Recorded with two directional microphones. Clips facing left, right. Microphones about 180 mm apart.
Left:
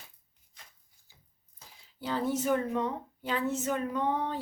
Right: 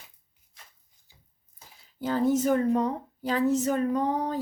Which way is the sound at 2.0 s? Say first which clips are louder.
Right 7 dB; 45° right (ahead or behind).